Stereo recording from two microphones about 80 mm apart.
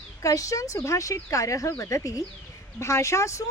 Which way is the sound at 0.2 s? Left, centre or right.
Left.